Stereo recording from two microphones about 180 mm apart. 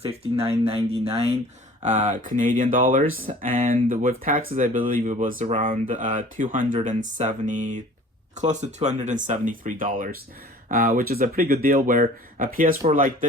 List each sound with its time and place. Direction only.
0.0 s speech: 35° right (ahead or behind)